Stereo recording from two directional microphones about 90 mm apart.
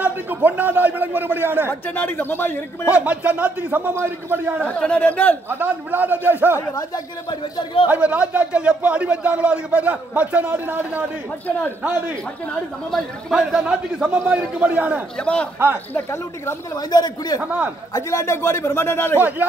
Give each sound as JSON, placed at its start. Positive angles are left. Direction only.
{"t": 0.0, "sound": "a man's voice", "side_deg": -20}
{"t": 1.9, "sound": "a man's voice", "side_deg": 20}
{"t": 2.9, "sound": "a man's voice", "side_deg": -15}
{"t": 4.7, "sound": "a man's voice", "side_deg": 15}
{"t": 5.5, "sound": "a man's voice", "side_deg": -20}
{"t": 6.5, "sound": "speech", "side_deg": 40}
{"t": 7.9, "sound": "a man's voice", "side_deg": -15}
{"t": 12.9, "sound": "a man's voice", "side_deg": 0}
{"t": 15.1, "sound": "a man's voice", "side_deg": 10}
{"t": 15.9, "sound": "a man's voice", "side_deg": 30}
{"t": 16.7, "sound": "speech", "side_deg": 50}
{"t": 17.9, "sound": "a man's voice", "side_deg": 35}